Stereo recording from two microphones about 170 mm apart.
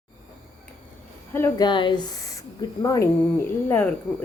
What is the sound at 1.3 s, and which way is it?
Speech, 15° left (ahead or behind).